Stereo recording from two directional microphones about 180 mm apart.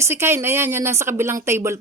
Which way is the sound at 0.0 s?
15° right (ahead or behind).